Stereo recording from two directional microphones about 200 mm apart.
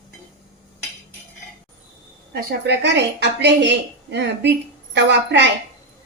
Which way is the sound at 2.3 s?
55° right (ahead or behind).